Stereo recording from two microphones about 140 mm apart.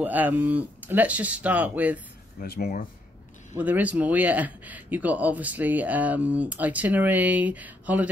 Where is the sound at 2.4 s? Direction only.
85° left.